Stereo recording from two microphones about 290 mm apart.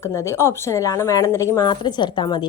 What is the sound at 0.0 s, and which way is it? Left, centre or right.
A woman's voice, centre.